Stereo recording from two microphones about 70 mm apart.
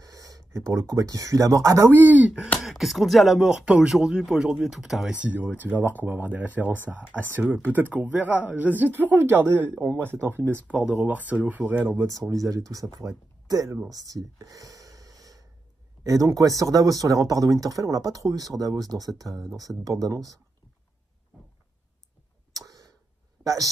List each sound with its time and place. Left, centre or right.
0.0 s speech: right
1.9 s speech: right
2.6 s speech: centre
5.1 s speech: centre
10.7 s speech: centre
12.0 s speech: right
13.8 s a sound: right
16.0 s speech: right
22.5 s tick: right
23.4 s speech: right